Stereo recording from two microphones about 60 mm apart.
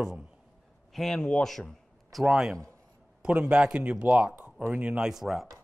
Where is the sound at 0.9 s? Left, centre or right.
Centre.